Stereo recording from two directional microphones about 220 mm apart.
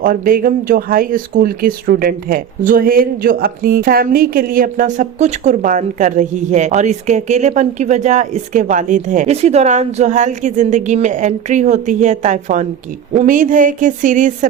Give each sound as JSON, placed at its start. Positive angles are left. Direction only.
{"t": 0.0, "sound": "speech", "side_deg": -40}